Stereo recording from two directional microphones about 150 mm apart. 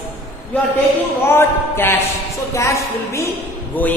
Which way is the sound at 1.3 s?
15° left (ahead or behind).